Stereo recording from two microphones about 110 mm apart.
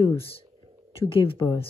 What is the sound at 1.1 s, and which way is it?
Speech, 55° left (ahead or behind).